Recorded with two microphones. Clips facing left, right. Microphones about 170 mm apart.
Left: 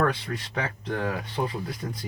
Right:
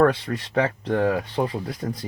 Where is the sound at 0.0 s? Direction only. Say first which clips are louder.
Right 7 dB; 45° right (ahead or behind).